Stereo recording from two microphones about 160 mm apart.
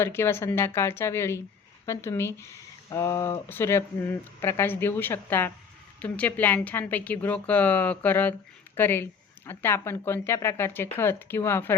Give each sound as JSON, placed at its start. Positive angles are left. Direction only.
{"t": 0.0, "sound": "a woman's voice", "side_deg": 15}